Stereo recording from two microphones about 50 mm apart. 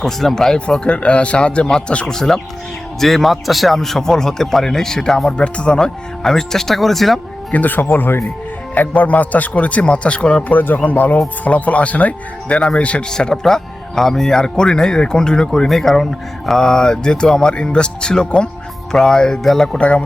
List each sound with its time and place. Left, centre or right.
0.0 s a man's voice: centre
0.9 s a man's voice: left
2.0 s a man's voice: centre
5.7 s a man's voice: centre
7.5 s a man's voice: left
10.5 s a man's voice: left
13.1 s a man's voice: centre
15.7 s a man's voice: centre
19.8 s a man's voice: left